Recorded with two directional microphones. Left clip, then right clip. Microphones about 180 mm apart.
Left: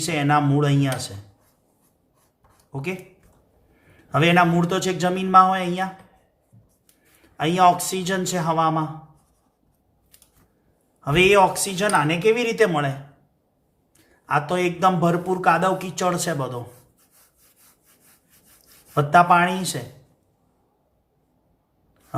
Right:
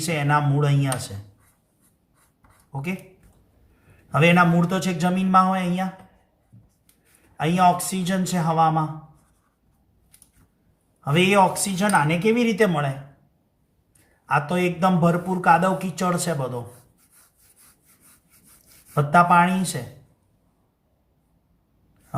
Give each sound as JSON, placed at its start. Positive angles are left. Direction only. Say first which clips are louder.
{"t": 0.0, "sound": "a man's voice", "louder": "left 2 dB", "side_deg": 35}
{"t": 4.1, "sound": "a man's voice", "louder": "even", "side_deg": 35}
{"t": 7.3, "sound": "a man's voice", "louder": "left 2 dB", "side_deg": 35}
{"t": 11.0, "sound": "a man's voice", "louder": "left 2 dB", "side_deg": 35}
{"t": 14.3, "sound": "a man's voice", "louder": "left 1 dB", "side_deg": 30}
{"t": 18.9, "sound": "a man's voice", "louder": "left 1 dB", "side_deg": 35}